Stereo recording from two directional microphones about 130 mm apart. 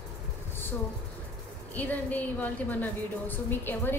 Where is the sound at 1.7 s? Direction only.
10° left (ahead or behind).